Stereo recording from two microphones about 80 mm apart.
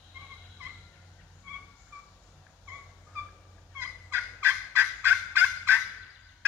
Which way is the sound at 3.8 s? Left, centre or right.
Right.